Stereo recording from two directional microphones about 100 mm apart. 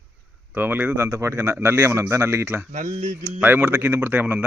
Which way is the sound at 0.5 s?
20° right (ahead or behind).